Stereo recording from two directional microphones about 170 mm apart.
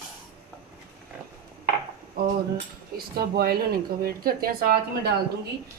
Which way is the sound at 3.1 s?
65° right (ahead or behind).